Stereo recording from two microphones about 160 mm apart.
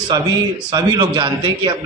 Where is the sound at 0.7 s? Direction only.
25° right (ahead or behind).